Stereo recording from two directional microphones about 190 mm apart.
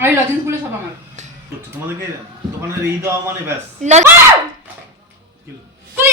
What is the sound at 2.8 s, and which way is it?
Speech, 15° right (ahead or behind).